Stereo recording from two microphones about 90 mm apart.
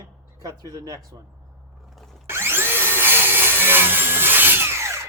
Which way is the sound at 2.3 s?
25° right (ahead or behind).